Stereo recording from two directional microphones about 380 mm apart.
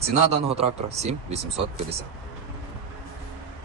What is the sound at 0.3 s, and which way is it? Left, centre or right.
Speech, centre.